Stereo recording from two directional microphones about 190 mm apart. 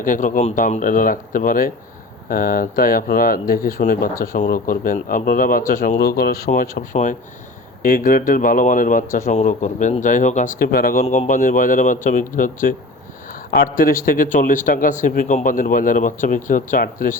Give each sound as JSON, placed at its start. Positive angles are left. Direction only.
{"t": 0.0, "sound": "speech", "side_deg": 45}